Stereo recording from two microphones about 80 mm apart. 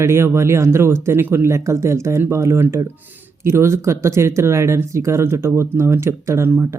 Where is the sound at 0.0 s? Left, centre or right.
Right.